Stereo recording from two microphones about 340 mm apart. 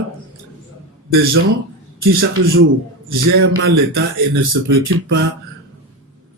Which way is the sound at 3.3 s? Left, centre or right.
Right.